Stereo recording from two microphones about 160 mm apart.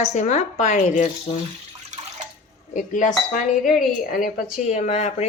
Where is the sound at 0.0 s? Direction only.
45° left (ahead or behind).